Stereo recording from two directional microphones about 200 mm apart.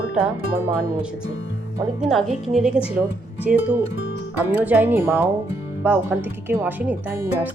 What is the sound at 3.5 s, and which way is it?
Speech, 45° right (ahead or behind).